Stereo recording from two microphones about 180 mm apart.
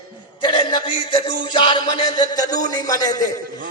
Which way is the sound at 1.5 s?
25° left (ahead or behind).